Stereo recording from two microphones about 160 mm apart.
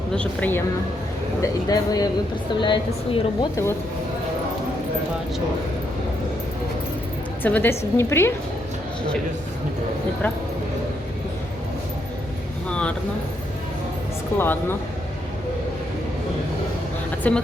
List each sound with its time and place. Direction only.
0.1 s speech: 10° left (ahead or behind)
1.4 s a woman's voice: 25° left (ahead or behind)
7.4 s speech: 10° left (ahead or behind)
12.6 s a sound: 5° left (ahead or behind)
14.3 s speech: 15° left (ahead or behind)
17.2 s speech: 10° left (ahead or behind)